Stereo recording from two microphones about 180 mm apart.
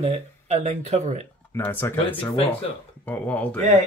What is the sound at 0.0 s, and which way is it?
Speech, 35° right (ahead or behind).